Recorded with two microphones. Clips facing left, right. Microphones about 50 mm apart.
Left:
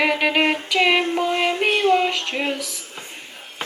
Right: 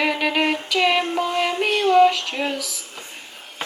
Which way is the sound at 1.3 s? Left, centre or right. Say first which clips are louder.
Even; left.